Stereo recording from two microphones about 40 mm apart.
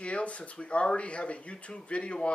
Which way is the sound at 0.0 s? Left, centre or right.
Left.